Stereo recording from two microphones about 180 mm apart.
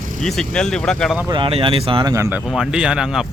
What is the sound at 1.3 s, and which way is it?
Speech, 30° right (ahead or behind).